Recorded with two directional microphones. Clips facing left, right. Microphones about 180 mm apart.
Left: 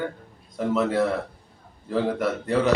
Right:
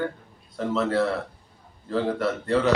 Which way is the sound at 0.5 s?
15° left (ahead or behind).